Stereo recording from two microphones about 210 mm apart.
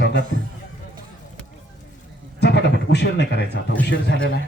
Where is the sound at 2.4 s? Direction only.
55° left (ahead or behind).